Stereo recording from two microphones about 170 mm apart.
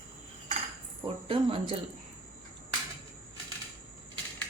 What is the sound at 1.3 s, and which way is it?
Speech, 30° right (ahead or behind).